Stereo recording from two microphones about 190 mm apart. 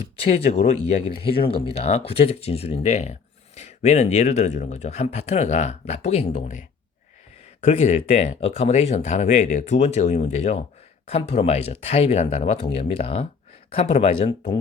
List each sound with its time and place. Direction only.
0.3 s speech: 30° left (ahead or behind)